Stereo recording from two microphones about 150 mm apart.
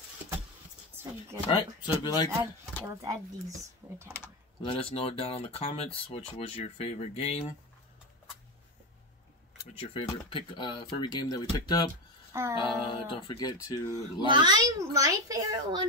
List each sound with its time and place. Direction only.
1.5 s speech: 30° left (ahead or behind)
2.3 s a child's voice: 20° right (ahead or behind)
4.6 s speech: 40° left (ahead or behind)
9.8 s speech: 40° left (ahead or behind)
12.3 s music: 20° right (ahead or behind)
12.5 s speech: 35° left (ahead or behind)
14.2 s a child's voice: 30° right (ahead or behind)